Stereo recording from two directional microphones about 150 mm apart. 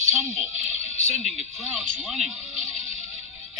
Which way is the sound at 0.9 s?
45° left (ahead or behind).